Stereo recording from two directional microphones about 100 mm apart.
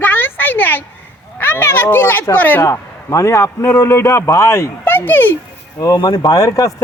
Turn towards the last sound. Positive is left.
turn(degrees=35)  # may be behind; listen again after turning